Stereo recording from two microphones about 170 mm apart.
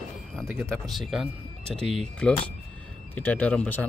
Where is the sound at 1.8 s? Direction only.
40° right (ahead or behind).